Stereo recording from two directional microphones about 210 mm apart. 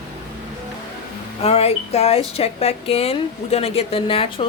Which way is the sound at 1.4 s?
30° left (ahead or behind).